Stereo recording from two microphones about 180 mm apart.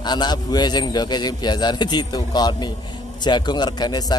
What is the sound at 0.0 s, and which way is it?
A man's voice, 25° left (ahead or behind).